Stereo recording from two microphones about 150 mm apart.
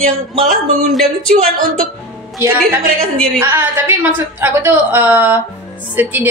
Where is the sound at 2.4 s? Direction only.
15° right (ahead or behind).